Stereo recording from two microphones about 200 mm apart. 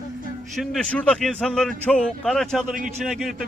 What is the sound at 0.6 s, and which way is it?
Speech, 5° left (ahead or behind).